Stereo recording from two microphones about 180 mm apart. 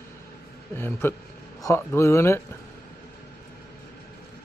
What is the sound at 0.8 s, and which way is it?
A man's voice, 10° left (ahead or behind).